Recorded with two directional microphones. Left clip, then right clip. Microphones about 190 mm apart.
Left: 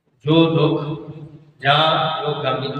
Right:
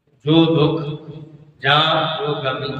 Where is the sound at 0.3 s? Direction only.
25° right (ahead or behind).